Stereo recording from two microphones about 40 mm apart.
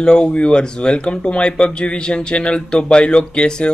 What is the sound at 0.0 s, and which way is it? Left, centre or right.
Speech, left.